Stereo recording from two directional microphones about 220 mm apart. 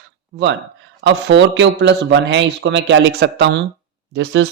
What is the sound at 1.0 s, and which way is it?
Speech, 50° right (ahead or behind).